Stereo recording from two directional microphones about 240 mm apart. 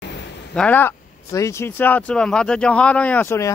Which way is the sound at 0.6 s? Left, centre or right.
Centre.